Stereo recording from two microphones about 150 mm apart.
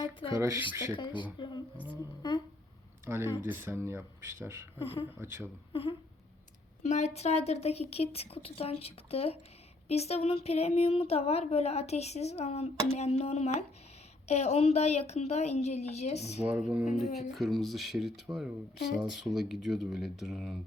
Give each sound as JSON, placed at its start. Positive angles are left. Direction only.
{"t": 0.0, "sound": "speech", "side_deg": 35}
{"t": 0.3, "sound": "speech", "side_deg": -20}
{"t": 0.9, "sound": "speech", "side_deg": 30}
{"t": 1.9, "sound": "humming", "side_deg": 30}
{"t": 3.1, "sound": "speech", "side_deg": -15}
{"t": 4.8, "sound": "speech", "side_deg": 35}
{"t": 5.2, "sound": "speech", "side_deg": -15}
{"t": 5.7, "sound": "a sound", "side_deg": 40}
{"t": 6.8, "sound": "speech", "side_deg": 50}
{"t": 16.5, "sound": "speech", "side_deg": -5}